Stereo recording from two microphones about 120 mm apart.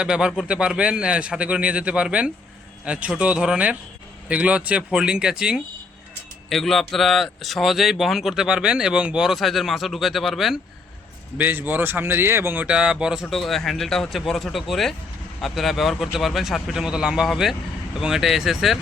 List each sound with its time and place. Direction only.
0.0 s speech: 5° right (ahead or behind)
11.3 s speech: 15° right (ahead or behind)